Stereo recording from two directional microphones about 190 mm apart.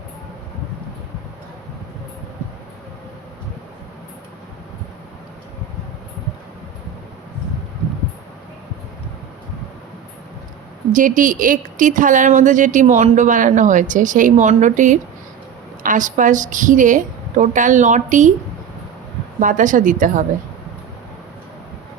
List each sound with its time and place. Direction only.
10.9 s a woman's voice: 45° right (ahead or behind)
19.4 s speech: 45° right (ahead or behind)